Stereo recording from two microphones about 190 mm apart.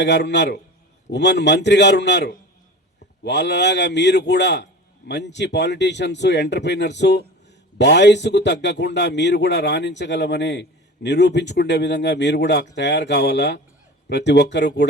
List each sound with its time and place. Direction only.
0.0 s a man's voice: 65° left (ahead or behind)